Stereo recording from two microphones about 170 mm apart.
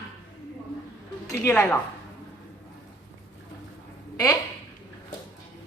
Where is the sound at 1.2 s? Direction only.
10° left (ahead or behind).